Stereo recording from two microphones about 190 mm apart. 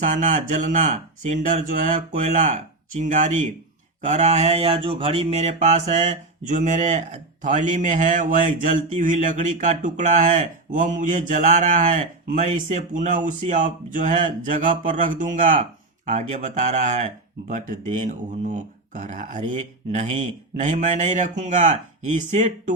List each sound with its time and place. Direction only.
0.2 s mantra: 40° right (ahead or behind)